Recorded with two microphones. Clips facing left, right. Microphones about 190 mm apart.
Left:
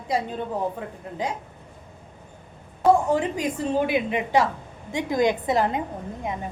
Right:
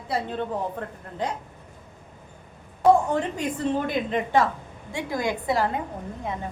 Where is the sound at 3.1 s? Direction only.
10° left (ahead or behind).